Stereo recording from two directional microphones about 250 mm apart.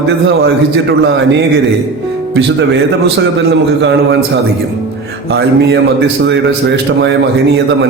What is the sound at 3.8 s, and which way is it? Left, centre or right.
Speech, right.